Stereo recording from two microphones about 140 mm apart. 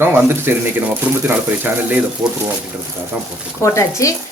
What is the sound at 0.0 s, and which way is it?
Speech, 15° right (ahead or behind).